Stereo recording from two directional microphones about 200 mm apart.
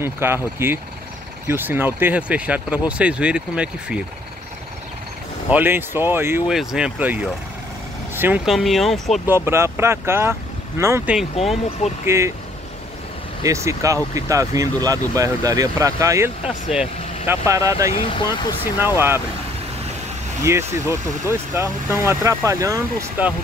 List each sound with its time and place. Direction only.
0.0 s speech: 10° right (ahead or behind)
5.5 s speech: 10° right (ahead or behind)
9.3 s speech: 15° right (ahead or behind)
11.8 s speech: 35° left (ahead or behind)
13.4 s speech: 15° right (ahead or behind)
17.3 s speech: 15° right (ahead or behind)
17.9 s speech: 25° left (ahead or behind)
18.9 s speech: 10° right (ahead or behind)
20.4 s speech: 15° right (ahead or behind)